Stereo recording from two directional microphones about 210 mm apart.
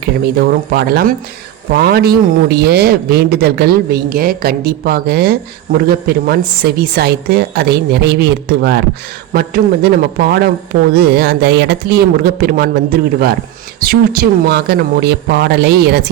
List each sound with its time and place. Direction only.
0.0 s speech: 50° right (ahead or behind)